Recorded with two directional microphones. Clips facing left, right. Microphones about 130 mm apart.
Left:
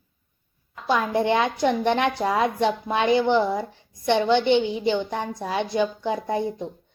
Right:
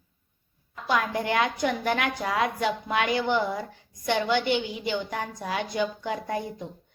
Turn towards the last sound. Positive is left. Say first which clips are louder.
# left 5 dB
turn(degrees=20)  # may be behind; listen again after turning